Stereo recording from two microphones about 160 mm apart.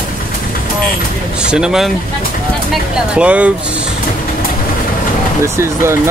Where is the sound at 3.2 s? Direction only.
10° right (ahead or behind).